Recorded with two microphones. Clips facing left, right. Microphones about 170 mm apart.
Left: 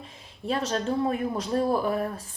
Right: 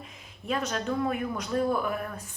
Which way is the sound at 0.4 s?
30° left (ahead or behind).